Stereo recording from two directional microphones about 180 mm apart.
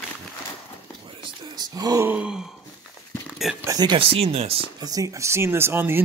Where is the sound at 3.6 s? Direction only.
20° right (ahead or behind).